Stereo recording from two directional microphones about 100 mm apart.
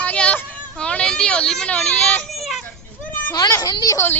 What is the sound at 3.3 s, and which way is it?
Speech, 40° left (ahead or behind).